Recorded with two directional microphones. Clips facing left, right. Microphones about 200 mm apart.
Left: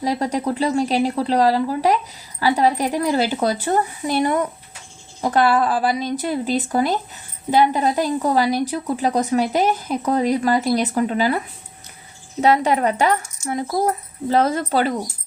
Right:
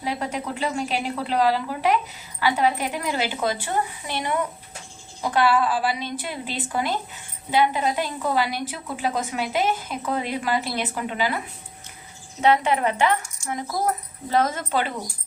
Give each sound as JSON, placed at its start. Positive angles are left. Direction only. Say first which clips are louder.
{"t": 0.0, "sound": "a woman's voice", "louder": "left 7 dB", "side_deg": 35}
{"t": 12.4, "sound": "a woman's voice", "louder": "left 3 dB", "side_deg": 40}